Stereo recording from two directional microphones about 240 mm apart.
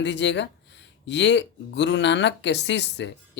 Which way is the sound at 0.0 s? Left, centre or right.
Left.